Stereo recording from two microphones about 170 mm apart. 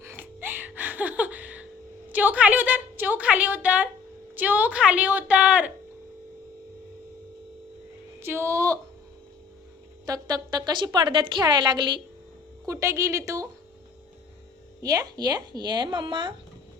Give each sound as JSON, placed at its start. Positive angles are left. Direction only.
{"t": 0.0, "sound": "music", "side_deg": -15}
{"t": 2.1, "sound": "a woman's voice", "side_deg": -10}
{"t": 8.2, "sound": "a woman's voice", "side_deg": -15}
{"t": 10.1, "sound": "a woman's voice", "side_deg": -25}
{"t": 14.8, "sound": "a woman's voice", "side_deg": -20}